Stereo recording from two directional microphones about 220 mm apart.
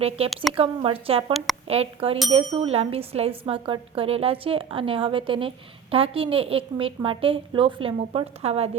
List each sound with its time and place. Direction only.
0.2 s speech: 25° right (ahead or behind)